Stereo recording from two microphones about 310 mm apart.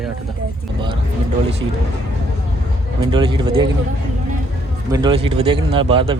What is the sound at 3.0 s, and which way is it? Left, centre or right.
Speech, centre.